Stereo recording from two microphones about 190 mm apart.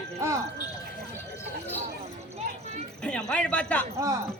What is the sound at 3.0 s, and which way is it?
Speech, 5° left (ahead or behind).